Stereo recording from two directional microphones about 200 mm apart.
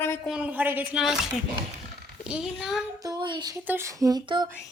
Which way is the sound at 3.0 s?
20° right (ahead or behind).